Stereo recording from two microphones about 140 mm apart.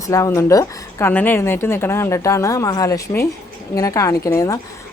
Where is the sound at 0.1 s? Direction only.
20° left (ahead or behind).